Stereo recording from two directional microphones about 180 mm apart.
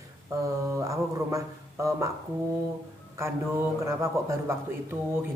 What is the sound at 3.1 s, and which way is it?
A man's voice, 15° right (ahead or behind).